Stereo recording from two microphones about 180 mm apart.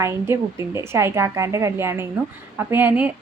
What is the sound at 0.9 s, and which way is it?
Speech, 15° right (ahead or behind).